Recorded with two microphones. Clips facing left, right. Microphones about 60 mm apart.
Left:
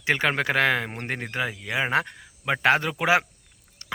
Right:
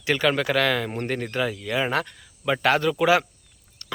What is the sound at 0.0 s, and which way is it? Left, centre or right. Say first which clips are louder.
Speech: right 1 dB; left.